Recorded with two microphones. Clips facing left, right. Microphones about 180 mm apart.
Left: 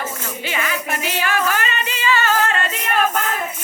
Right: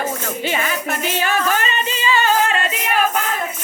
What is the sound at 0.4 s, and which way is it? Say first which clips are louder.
Speech: right 3 dB; 30° right (ahead or behind).